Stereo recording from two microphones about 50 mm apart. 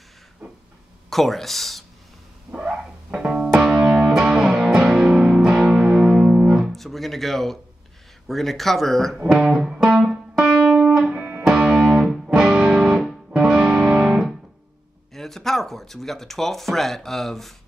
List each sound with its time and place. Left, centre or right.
1.1 s speech: centre
3.2 s music: centre
6.6 s music: centre
8.3 s speech: centre
9.3 s speech: centre
9.6 s music: centre
11.1 s music: right
11.4 s music: centre
15.1 s speech: centre